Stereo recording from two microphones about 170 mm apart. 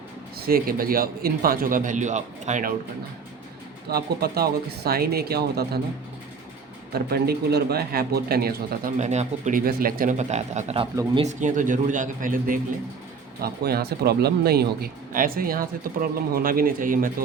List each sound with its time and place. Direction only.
0.3 s speech: 60° right (ahead or behind); by 2.7 s 45° right (ahead or behind)
3.8 s speech: 65° right (ahead or behind)
6.9 s speech: 65° right (ahead or behind)
9.0 s speech: 40° right (ahead or behind)
13.4 s speech: 65° right (ahead or behind)